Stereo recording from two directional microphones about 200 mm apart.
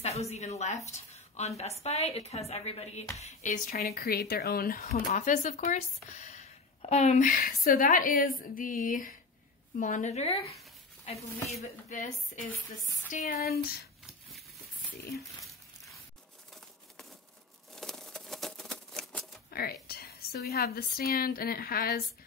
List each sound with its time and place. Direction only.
0.0 s a woman's voice: 30° left (ahead or behind); by 13.7 s 50° left (ahead or behind)
17.7 s typewriter: centre (ahead or behind)
19.5 s a woman's voice: 50° left (ahead or behind)